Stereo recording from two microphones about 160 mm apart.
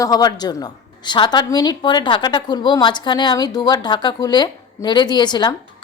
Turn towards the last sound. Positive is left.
turn(degrees=25)  # may be behind; listen again after turning